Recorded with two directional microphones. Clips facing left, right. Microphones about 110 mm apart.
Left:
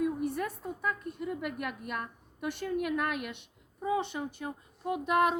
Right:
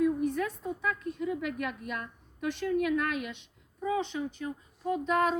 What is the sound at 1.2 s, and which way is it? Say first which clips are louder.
A woman's voice: right 3 dB; 5° left (ahead or behind).